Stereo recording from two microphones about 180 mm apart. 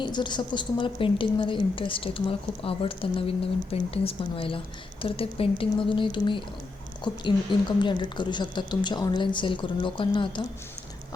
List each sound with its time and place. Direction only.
0.0 s a woman's voice: 25° left (ahead or behind)